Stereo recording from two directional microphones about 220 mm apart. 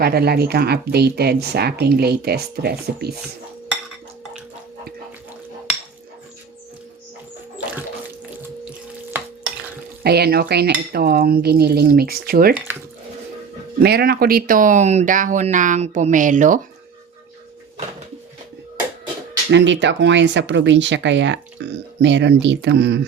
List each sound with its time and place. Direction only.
0.0 s speech: 45° right (ahead or behind)
10.0 s speech: 45° right (ahead or behind)
13.8 s speech: 45° right (ahead or behind)
19.5 s speech: 55° right (ahead or behind)